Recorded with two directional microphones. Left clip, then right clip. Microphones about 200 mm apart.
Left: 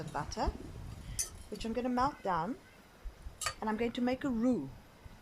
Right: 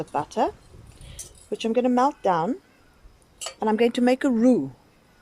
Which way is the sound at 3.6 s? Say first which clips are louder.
Right 15 dB; 50° right (ahead or behind).